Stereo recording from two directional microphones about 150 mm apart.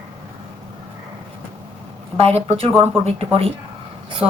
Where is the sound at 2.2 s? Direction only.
40° right (ahead or behind).